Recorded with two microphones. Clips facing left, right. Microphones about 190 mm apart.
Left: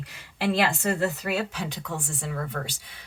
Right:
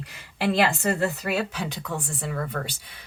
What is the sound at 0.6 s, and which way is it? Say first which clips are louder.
A woman's voice: right 2 dB; 45° right (ahead or behind).